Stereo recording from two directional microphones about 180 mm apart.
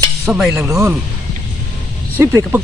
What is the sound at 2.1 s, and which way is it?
Speech, 15° right (ahead or behind).